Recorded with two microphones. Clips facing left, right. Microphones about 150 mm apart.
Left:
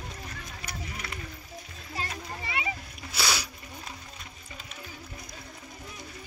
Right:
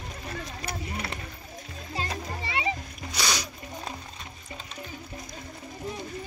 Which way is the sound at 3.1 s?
10° left (ahead or behind).